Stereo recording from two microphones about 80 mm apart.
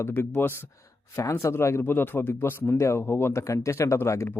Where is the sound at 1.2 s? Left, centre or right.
Left.